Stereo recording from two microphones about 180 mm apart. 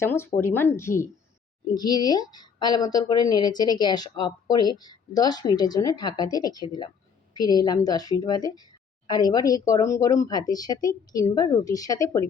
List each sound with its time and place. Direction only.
0.0 s a woman's voice: 15° left (ahead or behind)